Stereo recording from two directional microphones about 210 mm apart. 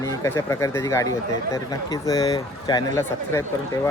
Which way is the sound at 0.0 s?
15° left (ahead or behind).